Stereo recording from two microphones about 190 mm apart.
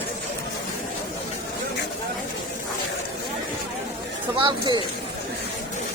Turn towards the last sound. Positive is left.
turn(degrees=-25)  # may be behind; listen again after turning